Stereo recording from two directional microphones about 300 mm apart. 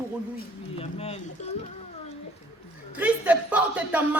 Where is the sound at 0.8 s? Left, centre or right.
Left.